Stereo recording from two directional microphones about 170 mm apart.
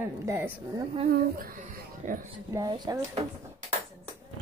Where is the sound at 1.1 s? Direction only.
60° right (ahead or behind).